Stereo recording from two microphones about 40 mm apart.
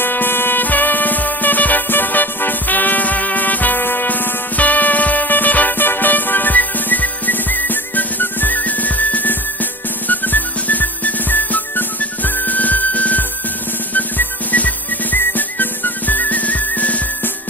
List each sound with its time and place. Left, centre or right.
0.0 s music: left
3.8 s music: left
4.1 s music: left
15.1 s whistle: left